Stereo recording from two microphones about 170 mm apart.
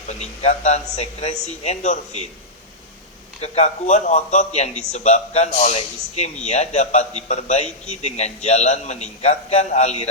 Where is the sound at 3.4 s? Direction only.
40° left (ahead or behind).